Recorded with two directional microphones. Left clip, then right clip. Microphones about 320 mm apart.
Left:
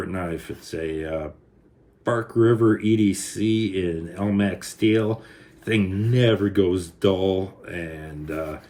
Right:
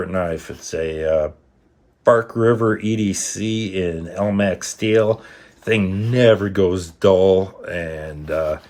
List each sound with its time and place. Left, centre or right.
0.1 s speech: right